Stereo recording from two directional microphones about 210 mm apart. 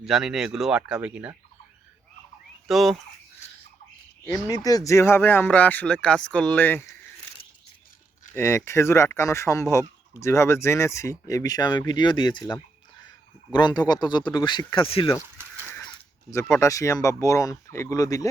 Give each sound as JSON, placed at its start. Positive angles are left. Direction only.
{"t": 0.0, "sound": "speech", "side_deg": 0}
{"t": 2.6, "sound": "speech", "side_deg": 0}
{"t": 4.4, "sound": "speech", "side_deg": 20}
{"t": 8.4, "sound": "speech", "side_deg": 10}
{"t": 15.8, "sound": "speech", "side_deg": 15}